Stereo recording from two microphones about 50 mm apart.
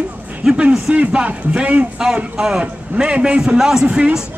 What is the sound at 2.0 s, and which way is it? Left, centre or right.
A man's voice, centre.